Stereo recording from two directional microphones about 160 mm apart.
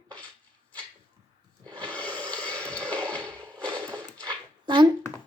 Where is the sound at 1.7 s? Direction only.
10° left (ahead or behind).